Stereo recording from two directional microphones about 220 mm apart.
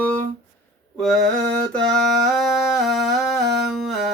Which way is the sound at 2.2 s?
Centre (ahead or behind).